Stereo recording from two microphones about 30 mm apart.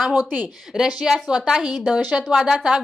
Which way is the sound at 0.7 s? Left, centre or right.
Centre.